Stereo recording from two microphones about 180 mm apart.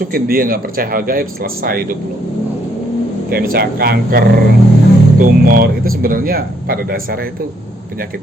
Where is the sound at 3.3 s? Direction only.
60° right (ahead or behind).